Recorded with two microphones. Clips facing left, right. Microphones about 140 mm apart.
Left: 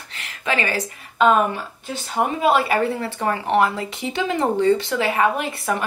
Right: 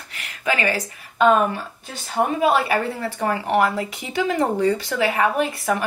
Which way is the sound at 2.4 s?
25° left (ahead or behind).